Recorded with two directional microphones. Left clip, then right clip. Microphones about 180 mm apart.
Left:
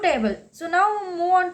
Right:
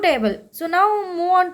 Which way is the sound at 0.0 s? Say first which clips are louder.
Right 3 dB; 30° right (ahead or behind).